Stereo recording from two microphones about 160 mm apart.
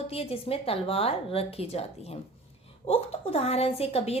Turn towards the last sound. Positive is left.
turn(degrees=40)  # may be behind; listen again after turning